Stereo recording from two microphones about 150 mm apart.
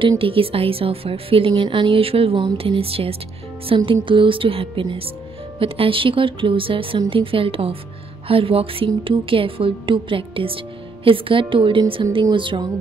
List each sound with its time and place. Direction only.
0.2 s a woman's voice: 35° right (ahead or behind)